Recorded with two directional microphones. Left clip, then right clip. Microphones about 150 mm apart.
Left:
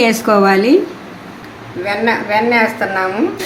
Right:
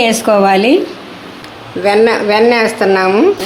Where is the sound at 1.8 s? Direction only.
55° right (ahead or behind).